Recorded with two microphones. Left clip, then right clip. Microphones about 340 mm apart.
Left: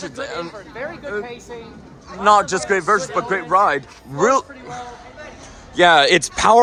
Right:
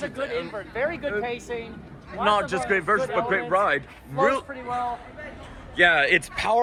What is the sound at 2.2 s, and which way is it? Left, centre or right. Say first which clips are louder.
Speech: left 8 dB; centre.